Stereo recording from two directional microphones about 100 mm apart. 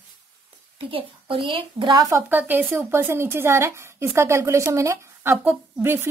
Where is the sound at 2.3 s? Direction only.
20° right (ahead or behind).